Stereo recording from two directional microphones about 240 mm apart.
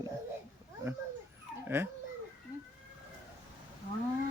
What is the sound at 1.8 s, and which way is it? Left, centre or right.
Speech, centre.